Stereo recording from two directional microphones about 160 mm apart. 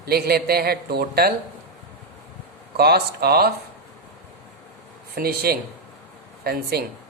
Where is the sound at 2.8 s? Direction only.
85° right.